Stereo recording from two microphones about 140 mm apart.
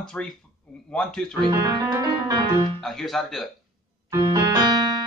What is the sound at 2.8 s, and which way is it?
Speech, centre (ahead or behind).